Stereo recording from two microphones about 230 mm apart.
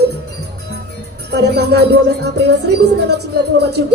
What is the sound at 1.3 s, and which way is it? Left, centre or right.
Speech, right.